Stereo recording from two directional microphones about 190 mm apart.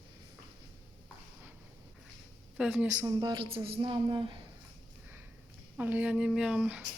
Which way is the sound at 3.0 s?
20° right (ahead or behind).